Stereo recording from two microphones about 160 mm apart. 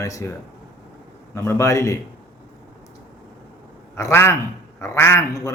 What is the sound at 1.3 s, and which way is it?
Speech, 15° left (ahead or behind).